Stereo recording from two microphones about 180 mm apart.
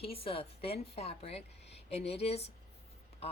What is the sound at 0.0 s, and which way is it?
Speech, 30° left (ahead or behind).